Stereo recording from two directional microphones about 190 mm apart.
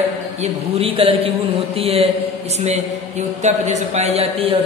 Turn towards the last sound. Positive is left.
turn(degrees=-30)  # may be behind; listen again after turning